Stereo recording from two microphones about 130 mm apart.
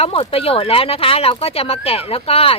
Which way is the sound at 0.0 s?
45° left (ahead or behind).